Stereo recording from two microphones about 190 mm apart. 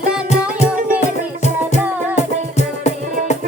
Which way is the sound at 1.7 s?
35° left (ahead or behind).